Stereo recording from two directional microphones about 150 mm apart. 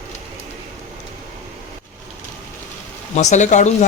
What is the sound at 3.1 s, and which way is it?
Speech, 50° left (ahead or behind).